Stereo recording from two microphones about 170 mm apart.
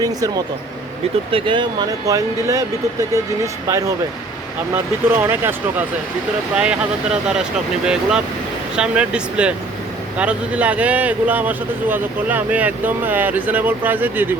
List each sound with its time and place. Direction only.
0.0 s speech: 20° right (ahead or behind); by 7.4 s 5° right (ahead or behind)
8.7 s speech: 5° right (ahead or behind)